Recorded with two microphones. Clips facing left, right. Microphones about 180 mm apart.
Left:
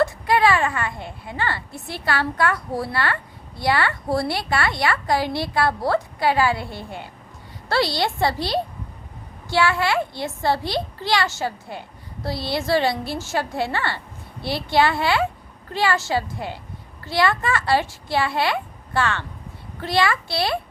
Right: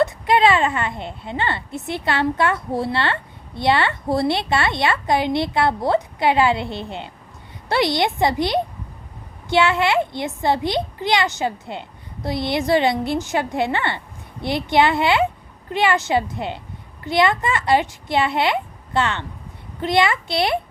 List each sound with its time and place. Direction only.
0.0 s a woman's voice: 20° right (ahead or behind)